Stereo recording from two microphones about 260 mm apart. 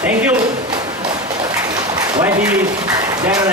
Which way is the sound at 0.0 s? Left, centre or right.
Centre.